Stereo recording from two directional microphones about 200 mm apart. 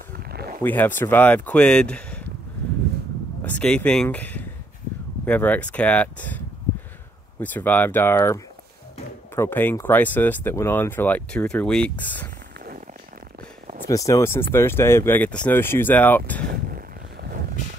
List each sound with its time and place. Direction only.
0.2 s a sound: 50° right (ahead or behind)
0.6 s speech: 10° left (ahead or behind)
3.4 s speech: 5° left (ahead or behind)
13.8 s speech: 15° left (ahead or behind)
16.4 s vehicle: 50° right (ahead or behind)